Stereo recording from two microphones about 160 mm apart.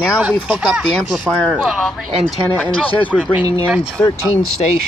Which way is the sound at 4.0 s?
10° left (ahead or behind).